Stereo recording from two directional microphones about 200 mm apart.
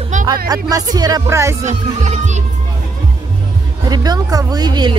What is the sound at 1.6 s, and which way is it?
Speech, 35° right (ahead or behind).